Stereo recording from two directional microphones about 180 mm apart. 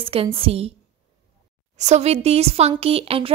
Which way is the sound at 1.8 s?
40° right (ahead or behind).